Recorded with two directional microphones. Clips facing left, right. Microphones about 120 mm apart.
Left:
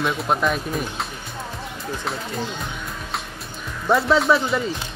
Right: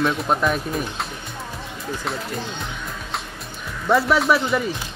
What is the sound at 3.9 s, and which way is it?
Speech, 25° left (ahead or behind).